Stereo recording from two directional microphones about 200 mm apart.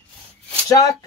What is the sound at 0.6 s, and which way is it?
Speech, 15° left (ahead or behind).